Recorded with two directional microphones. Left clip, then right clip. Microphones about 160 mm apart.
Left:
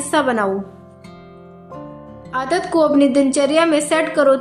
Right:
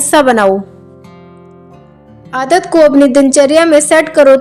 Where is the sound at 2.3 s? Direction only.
50° right (ahead or behind).